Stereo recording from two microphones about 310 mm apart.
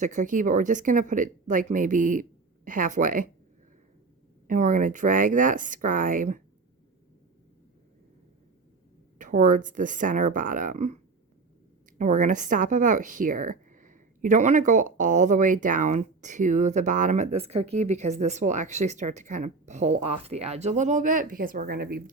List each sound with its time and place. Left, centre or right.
0.0 s speech: right
4.4 s speech: right
9.1 s speech: right
11.9 s speech: right